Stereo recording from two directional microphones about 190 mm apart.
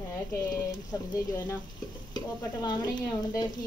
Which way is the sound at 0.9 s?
15° left (ahead or behind).